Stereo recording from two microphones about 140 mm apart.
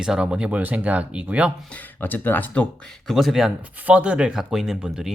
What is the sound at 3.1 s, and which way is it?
Speech, centre (ahead or behind).